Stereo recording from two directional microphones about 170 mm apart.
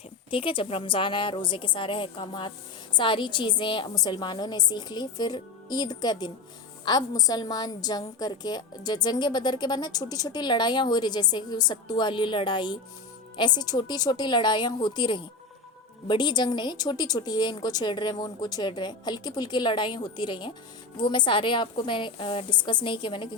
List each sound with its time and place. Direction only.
0.3 s a woman's voice: 30° left (ahead or behind)